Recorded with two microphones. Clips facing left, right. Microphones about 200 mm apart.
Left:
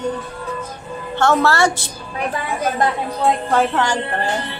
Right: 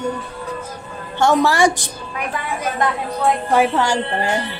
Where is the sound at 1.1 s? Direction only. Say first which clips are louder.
Right 1 dB; 15° right (ahead or behind).